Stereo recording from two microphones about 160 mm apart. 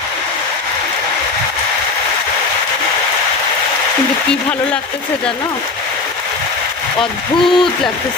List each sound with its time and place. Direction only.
7.0 s speech: 30° left (ahead or behind)